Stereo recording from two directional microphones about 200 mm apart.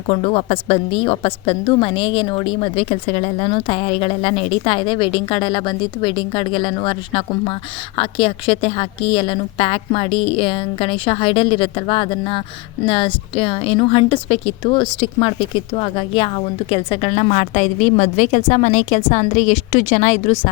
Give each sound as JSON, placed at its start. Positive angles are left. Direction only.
{"t": 0.1, "sound": "a woman's voice", "side_deg": 30}